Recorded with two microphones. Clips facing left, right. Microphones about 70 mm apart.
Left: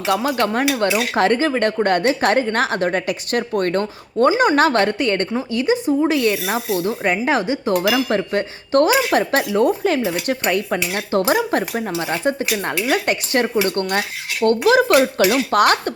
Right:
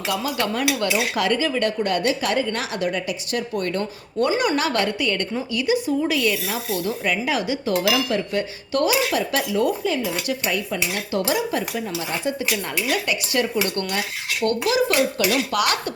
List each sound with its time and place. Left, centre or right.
0.1 s speech: left
4.4 s speech: left
5.3 s speech: left
7.7 s speech: left